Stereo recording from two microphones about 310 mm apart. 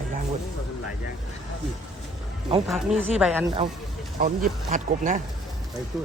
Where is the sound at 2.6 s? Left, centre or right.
Centre.